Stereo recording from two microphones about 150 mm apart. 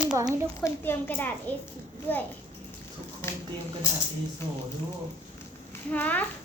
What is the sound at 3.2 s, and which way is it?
Speech, 15° left (ahead or behind).